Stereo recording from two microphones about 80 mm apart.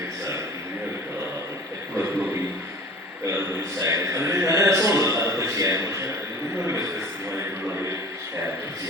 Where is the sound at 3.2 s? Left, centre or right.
Right.